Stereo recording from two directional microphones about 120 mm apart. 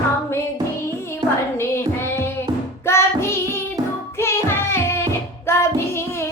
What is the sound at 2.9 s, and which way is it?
Music, 20° left (ahead or behind).